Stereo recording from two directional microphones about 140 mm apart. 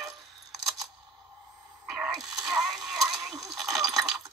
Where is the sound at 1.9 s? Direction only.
Centre (ahead or behind).